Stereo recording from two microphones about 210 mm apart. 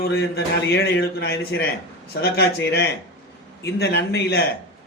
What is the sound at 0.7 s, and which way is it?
Speech, 50° left (ahead or behind).